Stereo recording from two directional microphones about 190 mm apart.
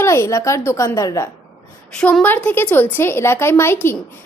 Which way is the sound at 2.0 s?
5° left (ahead or behind).